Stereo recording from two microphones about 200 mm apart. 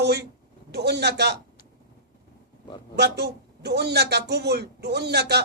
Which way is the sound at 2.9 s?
55° right (ahead or behind).